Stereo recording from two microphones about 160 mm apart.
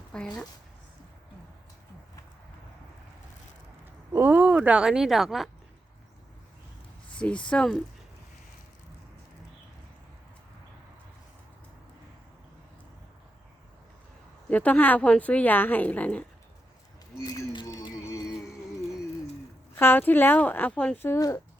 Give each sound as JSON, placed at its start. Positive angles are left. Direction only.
{"t": 0.1, "sound": "speech", "side_deg": 5}
{"t": 4.1, "sound": "speech", "side_deg": -15}
{"t": 7.1, "sound": "speech", "side_deg": 5}
{"t": 14.5, "sound": "speech", "side_deg": 10}
{"t": 17.2, "sound": "a sound", "side_deg": 25}
{"t": 18.1, "sound": "music", "side_deg": 20}
{"t": 19.7, "sound": "speech", "side_deg": 15}